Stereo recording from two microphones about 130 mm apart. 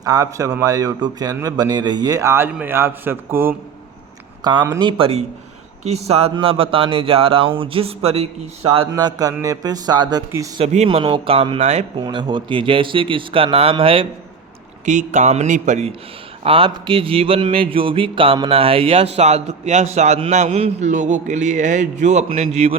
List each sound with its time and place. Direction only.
0.0 s a man's voice: 30° right (ahead or behind)
4.4 s a man's voice: 30° right (ahead or behind); by 8.9 s 50° right (ahead or behind)
8.9 s speech: 30° right (ahead or behind)
10.6 s a man's voice: 60° right (ahead or behind)
10.8 s speech: 40° right (ahead or behind); by 11.9 s 55° right (ahead or behind)
11.9 s a man's voice: 40° right (ahead or behind)
14.8 s speech: 70° right (ahead or behind)
16.4 s a man's voice: 45° right (ahead or behind)